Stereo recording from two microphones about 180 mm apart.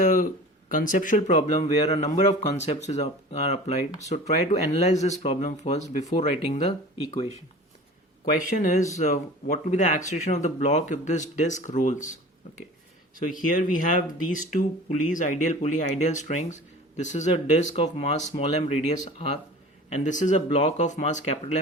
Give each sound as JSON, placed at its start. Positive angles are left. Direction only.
{"t": 0.0, "sound": "a sound", "side_deg": 50}
{"t": 0.7, "sound": "speech", "side_deg": 50}
{"t": 13.1, "sound": "speech", "side_deg": 45}